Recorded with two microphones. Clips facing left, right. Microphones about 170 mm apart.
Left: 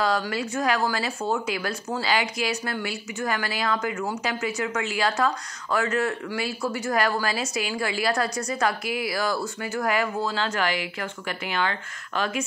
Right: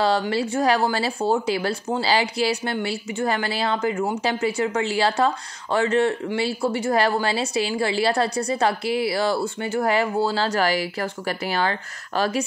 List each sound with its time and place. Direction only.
0.0 s speech: 30° right (ahead or behind)